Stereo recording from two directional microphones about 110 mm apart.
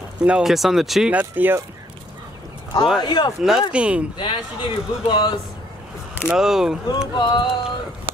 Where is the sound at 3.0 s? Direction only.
40° left (ahead or behind).